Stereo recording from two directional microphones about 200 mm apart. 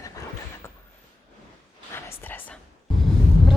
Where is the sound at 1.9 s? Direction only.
10° left (ahead or behind).